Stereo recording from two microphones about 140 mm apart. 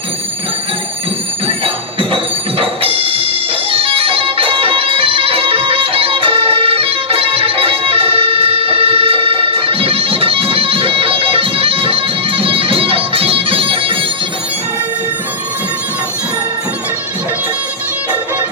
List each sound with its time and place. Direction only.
1.5 s music: 40° right (ahead or behind)